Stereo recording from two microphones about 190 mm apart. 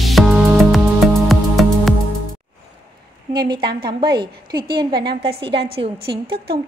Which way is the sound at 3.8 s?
25° right (ahead or behind).